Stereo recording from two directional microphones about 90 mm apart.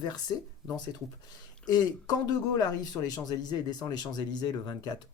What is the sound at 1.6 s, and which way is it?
Speech, 50° left (ahead or behind).